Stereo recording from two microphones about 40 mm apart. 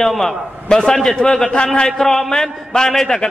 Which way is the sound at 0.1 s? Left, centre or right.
Centre.